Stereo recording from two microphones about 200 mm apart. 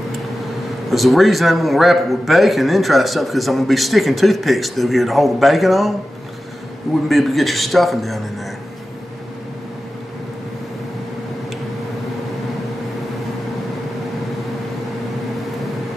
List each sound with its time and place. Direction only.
0.8 s a man's voice: centre (ahead or behind)
7.1 s a man's voice: centre (ahead or behind)